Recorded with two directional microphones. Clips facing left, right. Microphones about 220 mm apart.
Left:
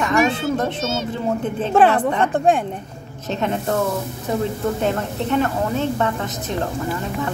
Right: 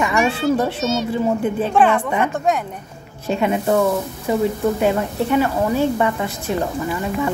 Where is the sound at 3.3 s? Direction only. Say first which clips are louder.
Right 4 dB; 10° right (ahead or behind).